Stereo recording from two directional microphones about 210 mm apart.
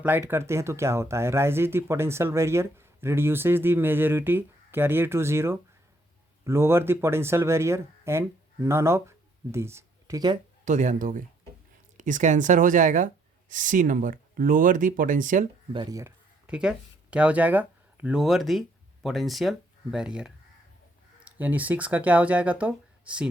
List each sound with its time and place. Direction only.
0.0 s speech: 10° right (ahead or behind)
10.7 s speech: 35° right (ahead or behind)
15.7 s speech: 20° right (ahead or behind)
16.5 s speech: 5° right (ahead or behind)